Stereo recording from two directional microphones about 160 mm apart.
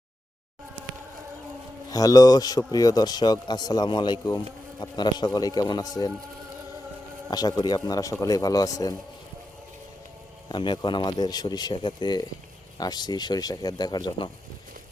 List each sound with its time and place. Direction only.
1.9 s a man's voice: 20° left (ahead or behind)
7.3 s a man's voice: 25° left (ahead or behind)
10.5 s a man's voice: 30° left (ahead or behind)